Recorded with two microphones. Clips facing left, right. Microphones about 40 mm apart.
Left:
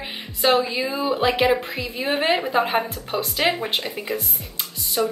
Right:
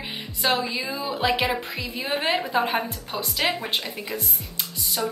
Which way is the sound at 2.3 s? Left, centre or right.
Left.